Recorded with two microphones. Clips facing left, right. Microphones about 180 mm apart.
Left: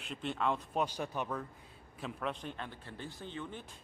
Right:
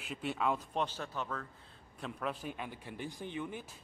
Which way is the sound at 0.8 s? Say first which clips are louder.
Left 2 dB; 15° left (ahead or behind).